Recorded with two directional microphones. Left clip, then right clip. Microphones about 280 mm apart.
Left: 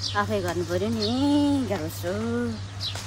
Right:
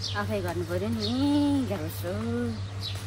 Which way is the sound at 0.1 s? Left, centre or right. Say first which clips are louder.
Left 6 dB; left.